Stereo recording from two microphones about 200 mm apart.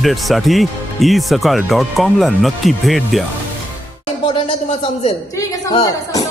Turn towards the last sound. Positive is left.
turn(degrees=20)  # may be behind; listen again after turning